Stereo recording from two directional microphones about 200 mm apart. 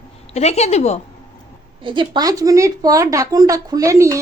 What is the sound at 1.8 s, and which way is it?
A woman's voice, 25° right (ahead or behind).